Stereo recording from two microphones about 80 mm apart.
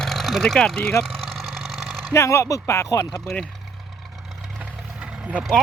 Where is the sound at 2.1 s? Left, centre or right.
Left.